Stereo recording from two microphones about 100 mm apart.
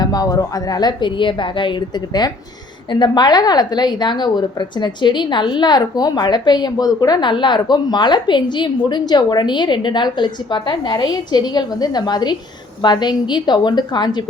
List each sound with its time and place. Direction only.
0.0 s a woman's voice: 40° left (ahead or behind)
2.9 s a woman's voice: 45° left (ahead or behind)